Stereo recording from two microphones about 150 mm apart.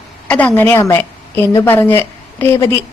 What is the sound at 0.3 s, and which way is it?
A woman's voice, 10° left (ahead or behind).